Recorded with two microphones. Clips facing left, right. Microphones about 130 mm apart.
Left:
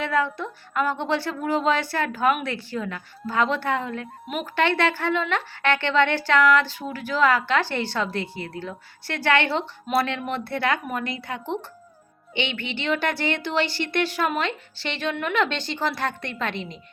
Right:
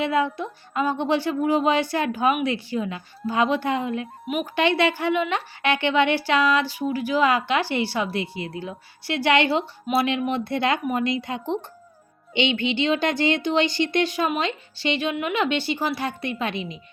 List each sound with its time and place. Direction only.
0.0 s a woman's voice: 15° right (ahead or behind)